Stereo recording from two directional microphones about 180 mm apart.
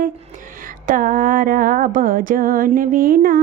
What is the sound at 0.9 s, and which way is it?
Mantra, 50° right (ahead or behind).